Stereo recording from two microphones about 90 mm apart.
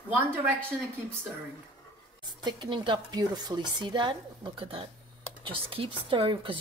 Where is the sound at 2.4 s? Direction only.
60° right (ahead or behind); by 4.9 s 80° right.